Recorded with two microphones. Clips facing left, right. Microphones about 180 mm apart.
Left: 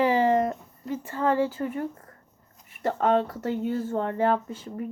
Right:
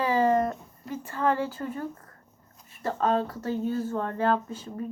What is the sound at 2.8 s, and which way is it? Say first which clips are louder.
Speech: left 3 dB; 25° left (ahead or behind).